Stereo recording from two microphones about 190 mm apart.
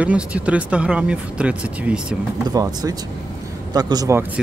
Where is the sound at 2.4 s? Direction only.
20° right (ahead or behind).